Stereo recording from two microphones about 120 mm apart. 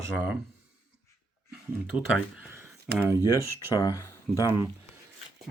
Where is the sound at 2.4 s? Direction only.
20° right (ahead or behind).